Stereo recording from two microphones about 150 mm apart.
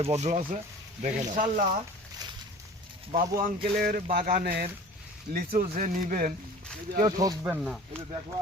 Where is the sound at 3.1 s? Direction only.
65° right (ahead or behind).